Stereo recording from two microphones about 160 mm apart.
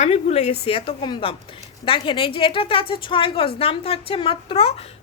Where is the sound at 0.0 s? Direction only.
40° left (ahead or behind).